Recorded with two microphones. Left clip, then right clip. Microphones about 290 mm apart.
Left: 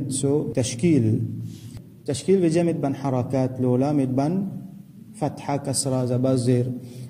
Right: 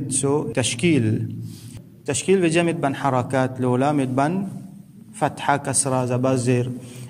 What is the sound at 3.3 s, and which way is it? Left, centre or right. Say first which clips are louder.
A man's voice: right 2 dB; right.